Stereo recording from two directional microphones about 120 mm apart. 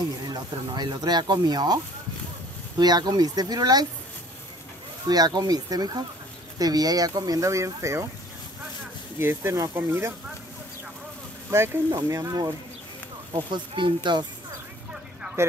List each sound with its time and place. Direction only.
0.0 s speech: 35° right (ahead or behind)
2.8 s speech: 35° right (ahead or behind)
5.0 s speech: 35° right (ahead or behind)
9.2 s speech: 20° right (ahead or behind)
11.9 s speech: 30° right (ahead or behind)
13.3 s speech: 40° right (ahead or behind)